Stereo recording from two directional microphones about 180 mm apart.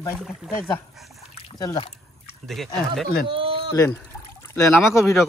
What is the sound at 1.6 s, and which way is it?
Speech, 20° left (ahead or behind).